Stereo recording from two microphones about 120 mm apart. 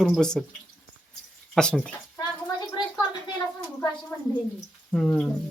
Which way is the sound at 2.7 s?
40° left (ahead or behind).